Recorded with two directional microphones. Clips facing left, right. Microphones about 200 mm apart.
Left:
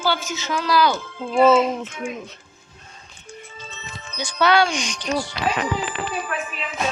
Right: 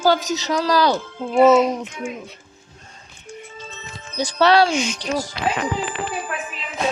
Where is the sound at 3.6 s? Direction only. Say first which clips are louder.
Right 1 dB; 50° right (ahead or behind).